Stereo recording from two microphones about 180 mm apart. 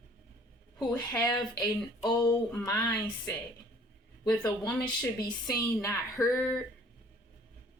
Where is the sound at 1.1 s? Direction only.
5° left (ahead or behind).